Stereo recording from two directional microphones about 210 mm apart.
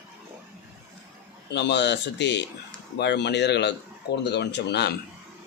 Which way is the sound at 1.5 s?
55° left (ahead or behind).